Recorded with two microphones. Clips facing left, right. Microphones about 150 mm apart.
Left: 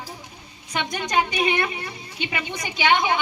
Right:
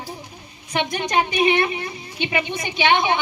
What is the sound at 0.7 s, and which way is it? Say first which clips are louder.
A woman's voice: right 2 dB; 25° right (ahead or behind).